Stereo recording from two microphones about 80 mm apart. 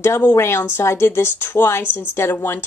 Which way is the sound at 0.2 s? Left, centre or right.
Left.